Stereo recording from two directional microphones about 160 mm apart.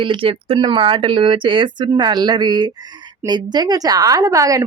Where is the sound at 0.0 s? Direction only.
35° right (ahead or behind).